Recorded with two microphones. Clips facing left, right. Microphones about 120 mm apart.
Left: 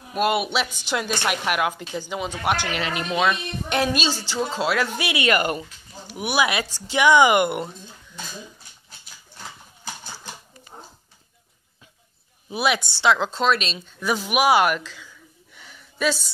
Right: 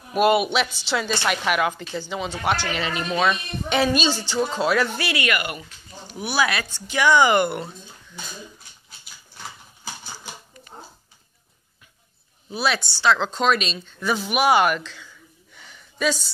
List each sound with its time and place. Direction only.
0.1 s a woman's voice: centre (ahead or behind)
4.9 s speech: 20° left (ahead or behind)
5.3 s speech: 35° left (ahead or behind)
6.0 s a woman's voice: 15° left (ahead or behind)
12.4 s a woman's voice: 15° left (ahead or behind)
13.2 s speech: centre (ahead or behind)
15.5 s gasp: centre (ahead or behind)